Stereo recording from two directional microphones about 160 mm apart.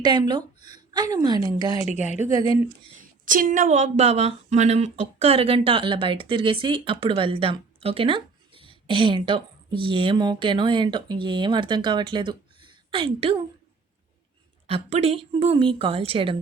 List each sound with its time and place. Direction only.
0.0 s a woman's voice: 25° right (ahead or behind)
3.0 s speech: 60° right (ahead or behind); by 13.4 s 35° right (ahead or behind)
14.7 s speech: 40° right (ahead or behind)